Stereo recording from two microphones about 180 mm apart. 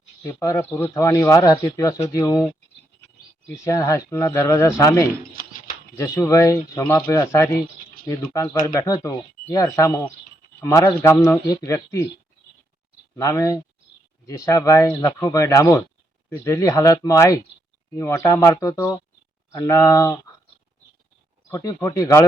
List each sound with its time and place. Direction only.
0.2 s speech: 15° left (ahead or behind)
3.5 s speech: 15° left (ahead or behind)
5.4 s a sound: 50° left (ahead or behind)
6.0 s speech: 15° left (ahead or behind)
13.1 s speech: 15° left (ahead or behind)
21.5 s speech: 15° left (ahead or behind)